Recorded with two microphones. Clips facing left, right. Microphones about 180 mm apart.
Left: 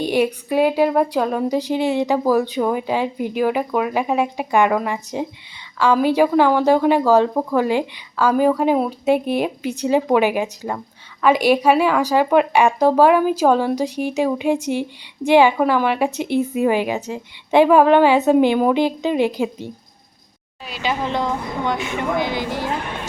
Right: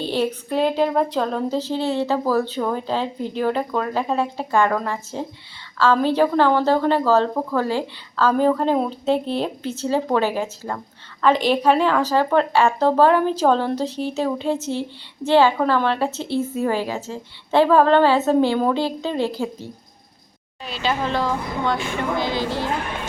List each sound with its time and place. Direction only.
0.0 s speech: 15° left (ahead or behind)